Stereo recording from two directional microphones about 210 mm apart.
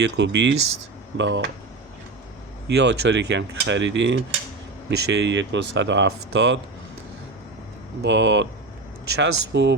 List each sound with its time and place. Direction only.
0.0 s speech: 55° right (ahead or behind)
2.6 s speech: 55° right (ahead or behind)
8.0 s speech: 60° right (ahead or behind)